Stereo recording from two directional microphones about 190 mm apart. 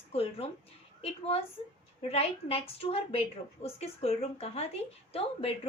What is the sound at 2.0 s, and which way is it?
A woman's voice, 30° left (ahead or behind).